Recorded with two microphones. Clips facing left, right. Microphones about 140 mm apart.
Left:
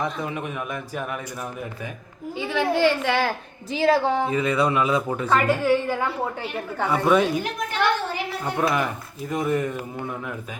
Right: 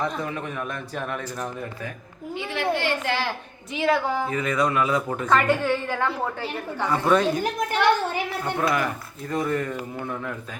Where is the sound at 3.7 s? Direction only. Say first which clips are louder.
Left 3 dB; 30° left (ahead or behind).